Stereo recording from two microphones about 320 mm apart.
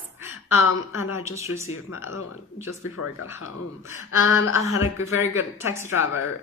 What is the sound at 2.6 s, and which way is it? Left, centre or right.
Speech, left.